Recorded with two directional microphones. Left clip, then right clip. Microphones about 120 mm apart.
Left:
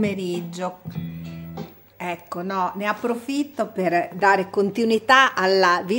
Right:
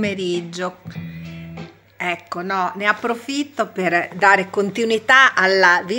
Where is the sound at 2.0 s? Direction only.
15° left (ahead or behind); by 6.0 s 40° left (ahead or behind).